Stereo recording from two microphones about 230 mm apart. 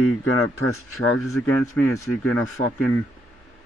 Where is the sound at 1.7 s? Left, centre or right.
Centre.